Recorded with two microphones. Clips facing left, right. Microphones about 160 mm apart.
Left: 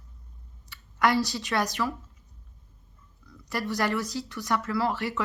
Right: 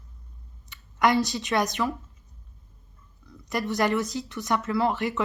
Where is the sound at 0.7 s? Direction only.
20° right (ahead or behind).